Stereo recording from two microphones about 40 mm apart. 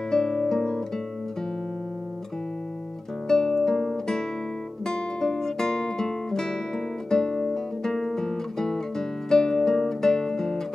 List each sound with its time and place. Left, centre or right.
0.1 s guitar: centre
3.3 s music: centre
4.8 s guitar: centre